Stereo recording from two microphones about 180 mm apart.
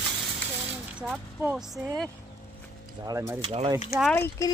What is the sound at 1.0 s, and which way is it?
Speech, 5° right (ahead or behind).